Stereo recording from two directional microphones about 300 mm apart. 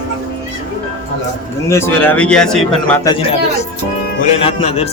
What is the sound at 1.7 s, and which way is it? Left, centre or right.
Speech, centre.